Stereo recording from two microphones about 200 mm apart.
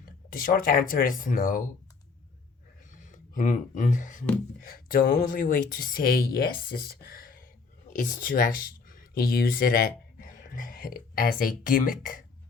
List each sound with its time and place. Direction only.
0.0 s speech: 45° left (ahead or behind)
2.9 s speech: 40° left (ahead or behind)